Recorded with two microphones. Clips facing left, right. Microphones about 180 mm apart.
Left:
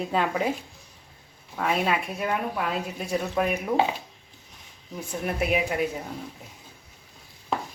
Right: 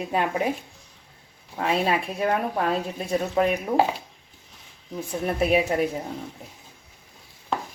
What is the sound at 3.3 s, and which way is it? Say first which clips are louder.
Speech: right 4 dB; 25° right (ahead or behind).